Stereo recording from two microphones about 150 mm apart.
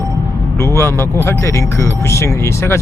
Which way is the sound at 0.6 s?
15° left (ahead or behind).